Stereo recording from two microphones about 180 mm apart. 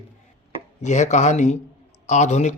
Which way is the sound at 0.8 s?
40° left (ahead or behind).